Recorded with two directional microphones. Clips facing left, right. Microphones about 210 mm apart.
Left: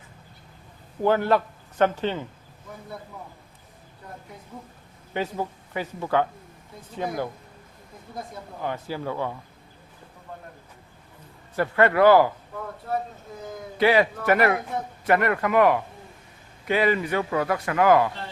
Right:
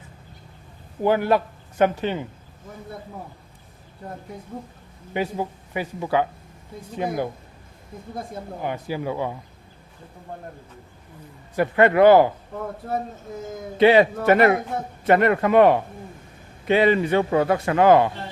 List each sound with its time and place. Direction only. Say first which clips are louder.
1.0 s speech: right 1 dB; 10° right (ahead or behind)
5.1 s speech: right 3 dB; 10° right (ahead or behind)
8.6 s speech: right 2 dB; 15° right (ahead or behind)
11.5 s a man's voice: right 3 dB; 15° right (ahead or behind)
13.7 s a man's voice: right 5 dB; 25° right (ahead or behind)